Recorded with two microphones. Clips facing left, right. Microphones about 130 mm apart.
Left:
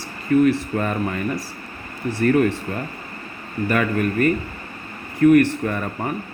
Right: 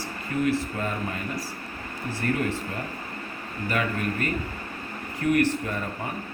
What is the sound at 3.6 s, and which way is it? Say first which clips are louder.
Speech: left 7 dB; 60° left (ahead or behind).